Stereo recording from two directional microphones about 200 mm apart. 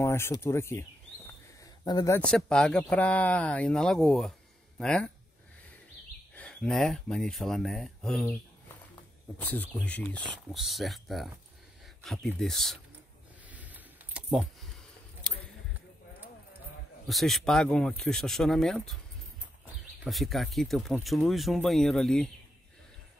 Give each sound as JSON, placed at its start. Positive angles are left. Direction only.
{"t": 0.0, "sound": "speech", "side_deg": 15}
{"t": 6.3, "sound": "speech", "side_deg": 5}
{"t": 9.4, "sound": "speech", "side_deg": 10}
{"t": 13.5, "sound": "a sound", "side_deg": -10}
{"t": 17.1, "sound": "speech", "side_deg": 0}
{"t": 20.0, "sound": "speech", "side_deg": 0}